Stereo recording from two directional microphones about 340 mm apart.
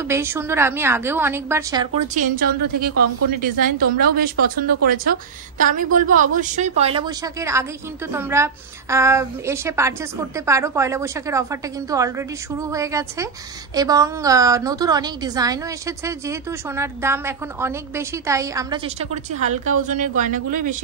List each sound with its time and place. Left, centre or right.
0.1 s a woman's voice: centre; by 20.7 s right